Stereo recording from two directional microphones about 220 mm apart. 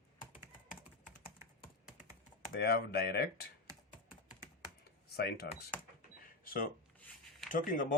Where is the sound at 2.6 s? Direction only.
45° left (ahead or behind).